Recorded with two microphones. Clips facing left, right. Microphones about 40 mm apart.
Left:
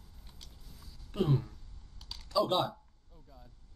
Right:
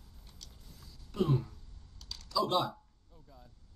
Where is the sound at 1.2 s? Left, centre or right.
Centre.